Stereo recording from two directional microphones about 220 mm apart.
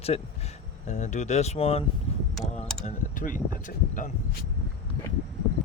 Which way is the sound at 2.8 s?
35° left (ahead or behind).